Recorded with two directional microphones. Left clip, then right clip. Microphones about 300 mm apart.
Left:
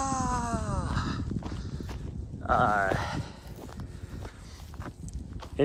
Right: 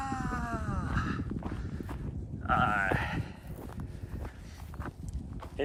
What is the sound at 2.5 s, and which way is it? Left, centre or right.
Sheep, centre.